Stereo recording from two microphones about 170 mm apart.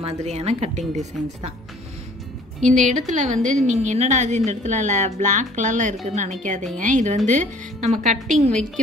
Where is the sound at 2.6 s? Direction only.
45° right (ahead or behind).